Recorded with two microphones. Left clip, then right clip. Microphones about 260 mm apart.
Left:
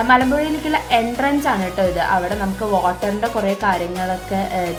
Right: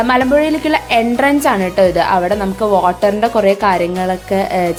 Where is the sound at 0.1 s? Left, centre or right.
Right.